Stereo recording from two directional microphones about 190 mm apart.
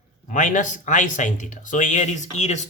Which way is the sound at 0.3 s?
40° left (ahead or behind).